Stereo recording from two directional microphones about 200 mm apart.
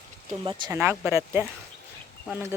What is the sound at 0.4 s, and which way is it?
Speech, 20° right (ahead or behind).